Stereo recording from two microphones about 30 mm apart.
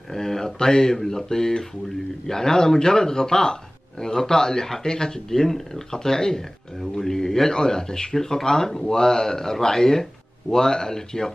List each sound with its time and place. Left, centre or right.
0.1 s speech: centre
5.3 s speech: centre